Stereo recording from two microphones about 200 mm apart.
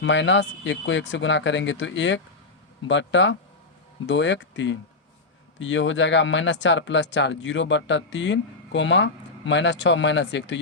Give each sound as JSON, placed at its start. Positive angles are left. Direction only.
{"t": 0.0, "sound": "speech", "side_deg": 65}